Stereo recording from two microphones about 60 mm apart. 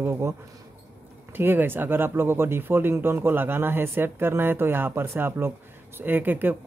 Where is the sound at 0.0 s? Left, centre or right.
Right.